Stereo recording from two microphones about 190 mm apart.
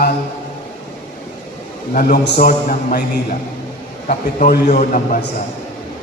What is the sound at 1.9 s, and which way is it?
A man's voice, 55° left (ahead or behind).